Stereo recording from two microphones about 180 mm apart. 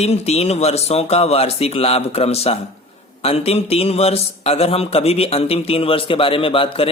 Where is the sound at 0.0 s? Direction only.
35° left (ahead or behind).